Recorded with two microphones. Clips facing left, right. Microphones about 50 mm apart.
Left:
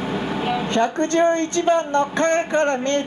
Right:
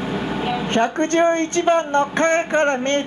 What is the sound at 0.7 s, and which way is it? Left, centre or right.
Speech, right.